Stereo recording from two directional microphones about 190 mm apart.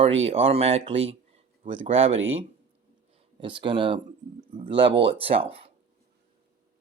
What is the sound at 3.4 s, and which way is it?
Speech, 25° right (ahead or behind).